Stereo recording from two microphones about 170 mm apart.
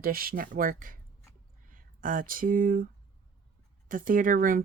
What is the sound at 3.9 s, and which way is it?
Speech, 55° right (ahead or behind).